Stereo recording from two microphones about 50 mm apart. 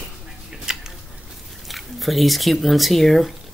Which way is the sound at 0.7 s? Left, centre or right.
Centre.